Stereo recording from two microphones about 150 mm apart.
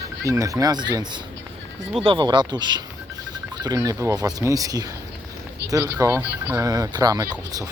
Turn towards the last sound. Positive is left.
turn(degrees=-25)  # may be behind; listen again after turning